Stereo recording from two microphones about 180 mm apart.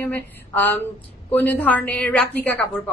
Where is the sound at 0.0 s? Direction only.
10° left (ahead or behind).